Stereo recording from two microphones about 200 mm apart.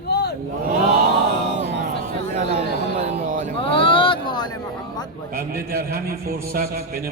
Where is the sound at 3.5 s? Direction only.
25° left (ahead or behind).